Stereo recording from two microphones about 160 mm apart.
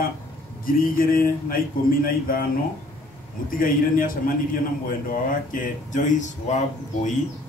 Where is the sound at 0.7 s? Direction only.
60° left (ahead or behind).